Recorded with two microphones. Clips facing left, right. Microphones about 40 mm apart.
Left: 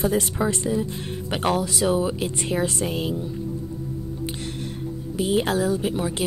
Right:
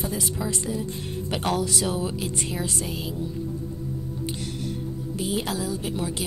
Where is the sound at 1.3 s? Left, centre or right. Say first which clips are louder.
Left 2 dB; centre.